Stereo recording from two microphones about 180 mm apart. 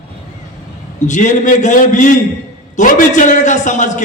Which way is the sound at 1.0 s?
45° left (ahead or behind).